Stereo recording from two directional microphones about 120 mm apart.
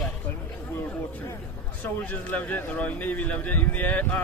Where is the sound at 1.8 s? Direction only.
15° left (ahead or behind).